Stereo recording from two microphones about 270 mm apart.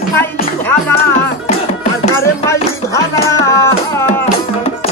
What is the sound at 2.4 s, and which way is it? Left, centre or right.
Music, centre.